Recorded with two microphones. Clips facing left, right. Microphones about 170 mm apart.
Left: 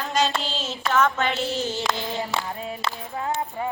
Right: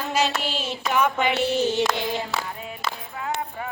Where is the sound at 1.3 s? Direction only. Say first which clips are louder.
Right 5 dB; 60° right (ahead or behind).